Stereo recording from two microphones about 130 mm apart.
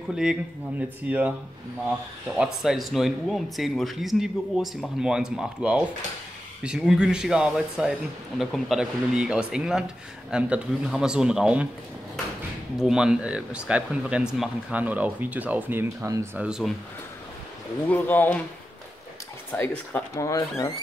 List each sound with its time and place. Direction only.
0.1 s speech: 5° right (ahead or behind)
2.3 s speech: 5° right (ahead or behind)
12.7 s speech: 5° right (ahead or behind); by 16.3 s 20° right (ahead or behind)
16.3 s speech: 5° right (ahead or behind)
17.8 s speech: 15° left (ahead or behind)
19.5 s speech: 15° left (ahead or behind)
20.2 s speech: 25° left (ahead or behind)